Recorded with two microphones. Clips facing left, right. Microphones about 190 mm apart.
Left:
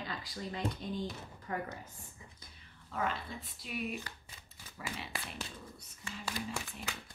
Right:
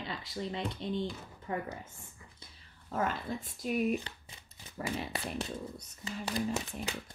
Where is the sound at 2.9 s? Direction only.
45° right (ahead or behind).